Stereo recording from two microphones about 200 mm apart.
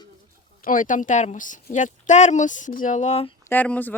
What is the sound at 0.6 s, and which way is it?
Speech, 40° left (ahead or behind).